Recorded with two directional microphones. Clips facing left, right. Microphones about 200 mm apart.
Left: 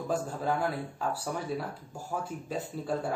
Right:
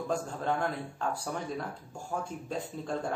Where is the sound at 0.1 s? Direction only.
5° left (ahead or behind).